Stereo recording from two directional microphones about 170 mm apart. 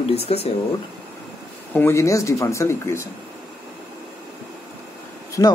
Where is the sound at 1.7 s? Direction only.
15° left (ahead or behind).